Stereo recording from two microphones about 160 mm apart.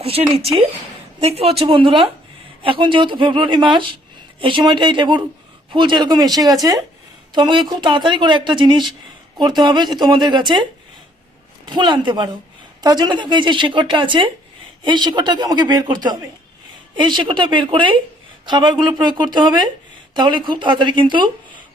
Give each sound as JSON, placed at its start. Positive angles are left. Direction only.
{"t": 0.0, "sound": "a woman's voice", "side_deg": -40}